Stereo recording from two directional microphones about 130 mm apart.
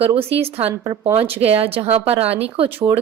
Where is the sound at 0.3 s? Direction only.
50° right (ahead or behind).